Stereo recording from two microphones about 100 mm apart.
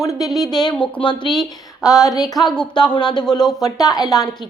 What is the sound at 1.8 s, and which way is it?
A woman's voice, 35° left (ahead or behind).